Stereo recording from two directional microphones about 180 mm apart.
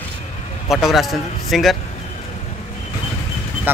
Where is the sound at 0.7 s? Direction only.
Centre (ahead or behind).